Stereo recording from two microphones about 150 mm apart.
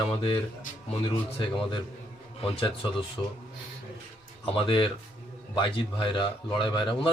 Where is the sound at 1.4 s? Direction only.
35° left (ahead or behind).